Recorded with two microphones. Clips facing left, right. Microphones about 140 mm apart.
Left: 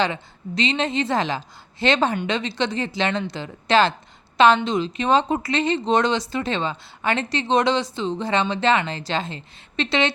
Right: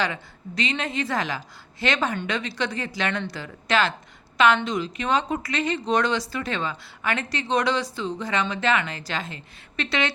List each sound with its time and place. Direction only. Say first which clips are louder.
0.0 s a woman's voice: left 4 dB; 25° left (ahead or behind)